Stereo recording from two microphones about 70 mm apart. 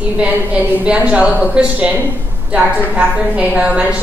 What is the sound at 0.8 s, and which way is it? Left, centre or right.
A woman's voice, centre.